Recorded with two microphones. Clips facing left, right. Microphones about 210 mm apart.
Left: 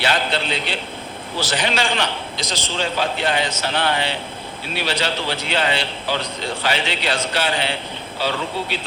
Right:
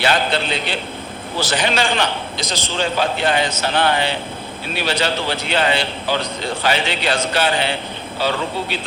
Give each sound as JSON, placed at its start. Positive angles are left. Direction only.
{"t": 0.0, "sound": "a man's voice", "side_deg": -50}